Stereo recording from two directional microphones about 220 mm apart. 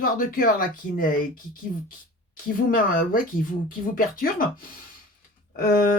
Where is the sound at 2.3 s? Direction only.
40° left (ahead or behind).